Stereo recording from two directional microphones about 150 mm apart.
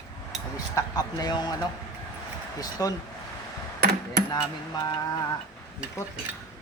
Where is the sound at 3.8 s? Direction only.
90° right.